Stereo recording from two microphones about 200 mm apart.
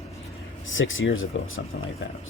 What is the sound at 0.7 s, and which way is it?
Speech, 75° left (ahead or behind).